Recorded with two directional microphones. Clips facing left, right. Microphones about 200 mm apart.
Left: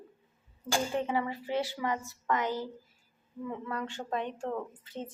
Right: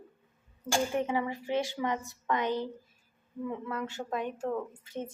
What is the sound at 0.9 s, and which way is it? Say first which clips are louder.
Speech: right 1 dB; 15° right (ahead or behind).